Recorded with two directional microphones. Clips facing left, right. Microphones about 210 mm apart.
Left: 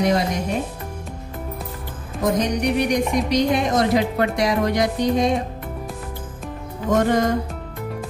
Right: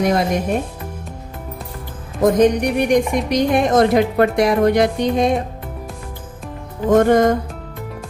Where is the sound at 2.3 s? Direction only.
50° right (ahead or behind).